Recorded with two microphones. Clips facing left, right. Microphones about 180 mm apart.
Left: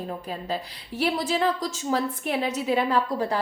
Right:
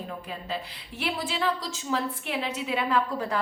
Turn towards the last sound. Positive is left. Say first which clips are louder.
# left 3 dB
turn(degrees=35)  # may be behind; listen again after turning